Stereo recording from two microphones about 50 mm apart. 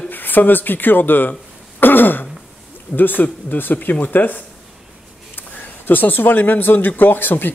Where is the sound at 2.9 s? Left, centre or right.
Left.